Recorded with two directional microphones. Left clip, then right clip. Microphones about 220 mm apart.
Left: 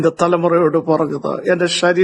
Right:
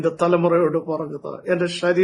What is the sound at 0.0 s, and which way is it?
Speech, 40° left (ahead or behind).